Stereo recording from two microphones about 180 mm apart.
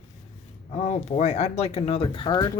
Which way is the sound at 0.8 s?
40° left (ahead or behind).